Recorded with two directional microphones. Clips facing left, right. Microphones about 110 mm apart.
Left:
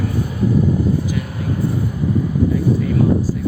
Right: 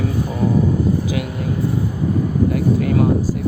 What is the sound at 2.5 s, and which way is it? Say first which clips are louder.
Speech: even; 65° right (ahead or behind).